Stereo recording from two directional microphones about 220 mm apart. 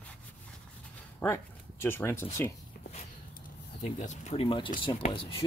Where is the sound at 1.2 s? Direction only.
10° left (ahead or behind).